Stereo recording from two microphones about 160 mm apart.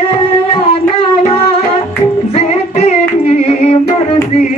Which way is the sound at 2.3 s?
40° left (ahead or behind).